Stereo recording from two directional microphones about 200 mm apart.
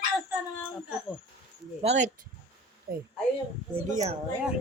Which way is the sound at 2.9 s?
50° right (ahead or behind).